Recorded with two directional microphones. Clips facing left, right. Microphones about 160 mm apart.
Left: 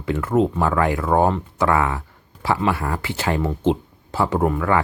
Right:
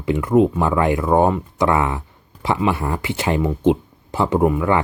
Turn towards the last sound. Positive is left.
turn(degrees=-15)  # may be behind; listen again after turning